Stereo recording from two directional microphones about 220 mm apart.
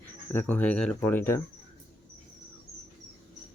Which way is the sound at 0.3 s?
5° left (ahead or behind).